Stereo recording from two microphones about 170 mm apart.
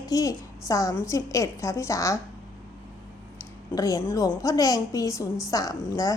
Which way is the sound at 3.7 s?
20° left (ahead or behind).